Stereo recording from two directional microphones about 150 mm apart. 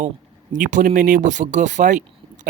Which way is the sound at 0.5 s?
60° right (ahead or behind).